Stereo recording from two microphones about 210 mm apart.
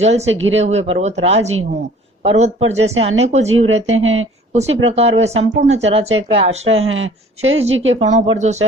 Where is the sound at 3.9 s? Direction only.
70° right (ahead or behind).